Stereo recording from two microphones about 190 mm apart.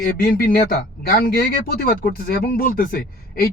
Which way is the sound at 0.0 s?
50° left (ahead or behind).